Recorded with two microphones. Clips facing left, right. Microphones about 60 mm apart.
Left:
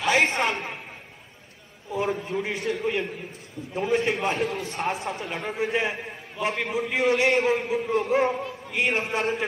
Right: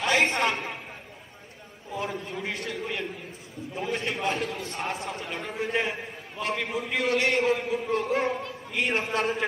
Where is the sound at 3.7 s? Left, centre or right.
Centre.